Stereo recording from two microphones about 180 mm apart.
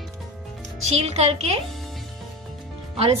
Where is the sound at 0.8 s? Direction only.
35° right (ahead or behind).